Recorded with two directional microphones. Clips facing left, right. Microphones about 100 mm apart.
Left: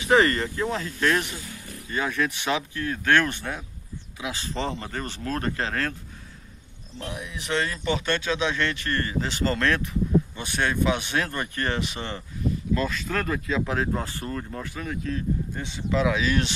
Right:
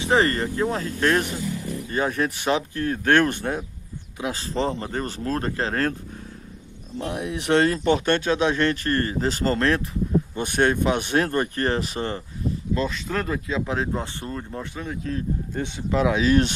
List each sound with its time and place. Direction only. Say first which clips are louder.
0.0 s speech: even; 30° right (ahead or behind)
7.1 s speech: right 8 dB; 65° right (ahead or behind); by 9.8 s 30° right (ahead or behind)
10.3 s speech: right 6 dB; 45° right (ahead or behind)
12.7 s speech: right 2 dB; 25° right (ahead or behind)
16.2 s speech: right 6 dB; 40° right (ahead or behind)